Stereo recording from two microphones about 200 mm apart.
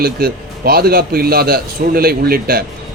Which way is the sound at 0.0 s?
50° right (ahead or behind).